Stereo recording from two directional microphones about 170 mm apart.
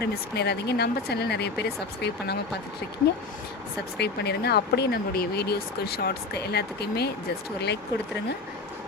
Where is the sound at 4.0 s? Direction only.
75° left (ahead or behind).